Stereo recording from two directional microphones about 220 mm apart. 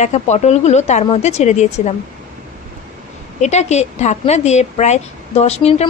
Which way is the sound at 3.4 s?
30° left (ahead or behind).